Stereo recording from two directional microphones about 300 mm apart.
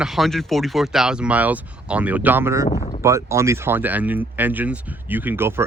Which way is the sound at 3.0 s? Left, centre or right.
Centre.